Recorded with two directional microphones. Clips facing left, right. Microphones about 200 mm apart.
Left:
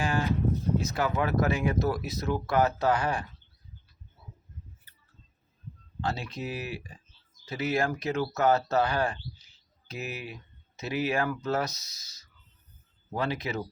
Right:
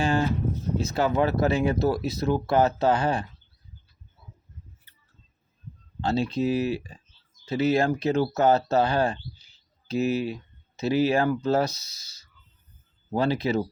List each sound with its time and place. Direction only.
0.0 s a sound: 25° right (ahead or behind)
0.8 s speech: 25° right (ahead or behind)
6.0 s speech: 25° right (ahead or behind)